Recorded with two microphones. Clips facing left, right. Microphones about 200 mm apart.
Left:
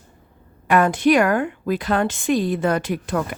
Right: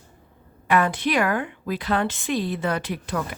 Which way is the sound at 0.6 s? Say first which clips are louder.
Left 6 dB; 45° left (ahead or behind).